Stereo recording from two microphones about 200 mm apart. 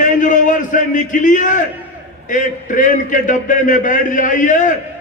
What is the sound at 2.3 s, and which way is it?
A man's voice, 40° left (ahead or behind).